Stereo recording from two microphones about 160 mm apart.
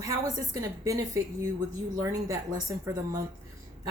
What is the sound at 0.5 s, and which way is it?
A woman's voice, 20° right (ahead or behind).